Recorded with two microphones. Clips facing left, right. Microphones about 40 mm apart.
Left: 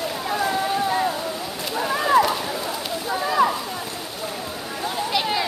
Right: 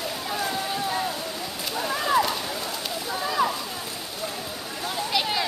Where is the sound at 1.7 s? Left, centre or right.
Centre.